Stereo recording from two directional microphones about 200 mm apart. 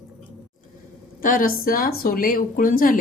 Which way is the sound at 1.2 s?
45° left (ahead or behind).